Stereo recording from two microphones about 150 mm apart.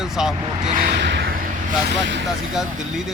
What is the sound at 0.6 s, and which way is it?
Vehicle, 60° right (ahead or behind).